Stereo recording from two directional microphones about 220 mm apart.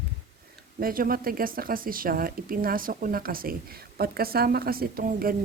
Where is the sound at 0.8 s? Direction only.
40° right (ahead or behind).